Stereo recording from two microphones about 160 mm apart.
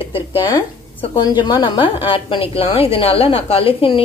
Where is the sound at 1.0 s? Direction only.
25° left (ahead or behind).